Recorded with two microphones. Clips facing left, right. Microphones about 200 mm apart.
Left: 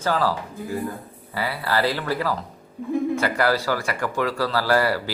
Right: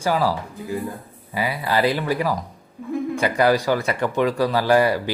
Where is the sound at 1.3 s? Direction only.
15° right (ahead or behind).